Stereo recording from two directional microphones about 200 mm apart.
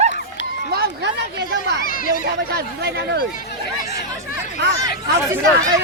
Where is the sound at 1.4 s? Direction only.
60° right (ahead or behind).